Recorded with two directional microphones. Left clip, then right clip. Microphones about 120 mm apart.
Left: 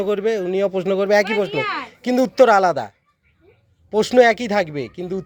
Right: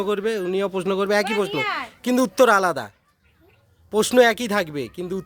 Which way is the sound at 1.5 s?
75° right (ahead or behind).